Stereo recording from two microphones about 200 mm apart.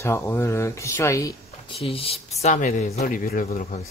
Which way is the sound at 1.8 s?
30° left (ahead or behind).